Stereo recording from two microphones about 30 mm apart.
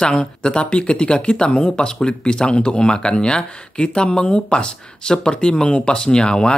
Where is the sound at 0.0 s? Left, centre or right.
Left.